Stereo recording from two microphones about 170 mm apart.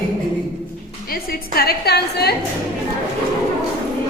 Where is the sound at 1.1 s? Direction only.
65° left (ahead or behind).